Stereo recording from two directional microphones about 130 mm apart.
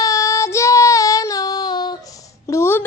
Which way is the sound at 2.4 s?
20° left (ahead or behind).